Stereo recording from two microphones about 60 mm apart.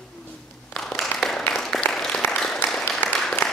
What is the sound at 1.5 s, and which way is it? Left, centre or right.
Applause, centre.